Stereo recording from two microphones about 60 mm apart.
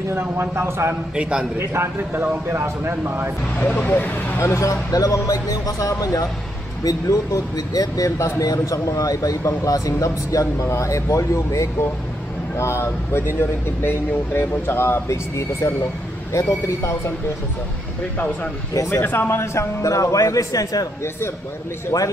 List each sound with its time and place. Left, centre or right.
0.1 s a man's voice: right
1.1 s a man's voice: centre
1.6 s speech: right
3.5 s speech: left
4.4 s speech: left
8.4 s speech: left
13.4 s speech: left
15.0 s speech: left
18.1 s speech: left
18.9 s speech: left
21.9 s speech: left